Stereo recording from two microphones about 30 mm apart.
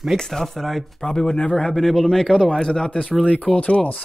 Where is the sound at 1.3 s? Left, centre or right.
Left.